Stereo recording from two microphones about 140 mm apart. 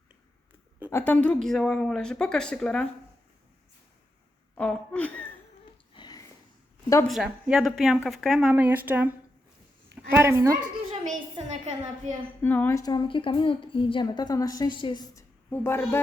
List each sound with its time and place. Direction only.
0.9 s a woman's voice: 15° left (ahead or behind)
4.5 s speech: 10° left (ahead or behind)
5.9 s a sound: 30° left (ahead or behind)
7.1 s speech: centre (ahead or behind)
8.5 s a woman's voice: 15° right (ahead or behind)
11.4 s a woman's voice: 55° right (ahead or behind)
12.4 s a woman's voice: 15° left (ahead or behind)
12.8 s a woman's voice: 30° left (ahead or behind)
15.4 s a woman's voice: 15° left (ahead or behind)